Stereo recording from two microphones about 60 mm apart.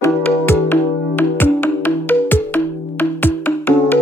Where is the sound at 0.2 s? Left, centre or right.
Left.